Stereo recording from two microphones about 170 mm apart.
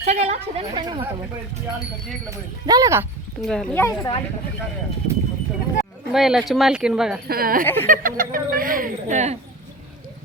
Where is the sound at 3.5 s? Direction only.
5° left (ahead or behind).